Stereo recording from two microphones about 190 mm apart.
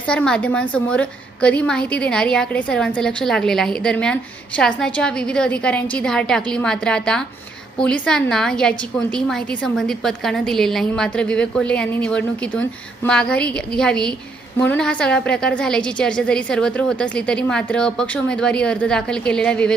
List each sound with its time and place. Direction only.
0.1 s a woman's voice: 5° left (ahead or behind)